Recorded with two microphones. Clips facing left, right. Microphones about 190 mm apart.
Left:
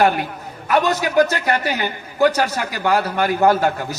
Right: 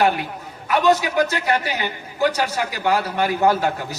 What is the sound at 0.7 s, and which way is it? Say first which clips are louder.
A man's voice: even; 45° left (ahead or behind).